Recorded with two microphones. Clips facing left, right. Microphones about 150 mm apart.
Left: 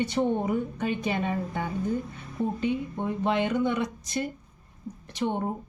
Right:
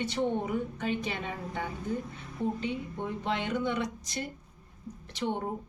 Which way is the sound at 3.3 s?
55° left (ahead or behind).